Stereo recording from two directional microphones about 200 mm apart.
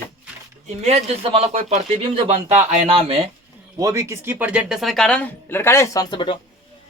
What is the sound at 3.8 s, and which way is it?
Speech, 15° right (ahead or behind).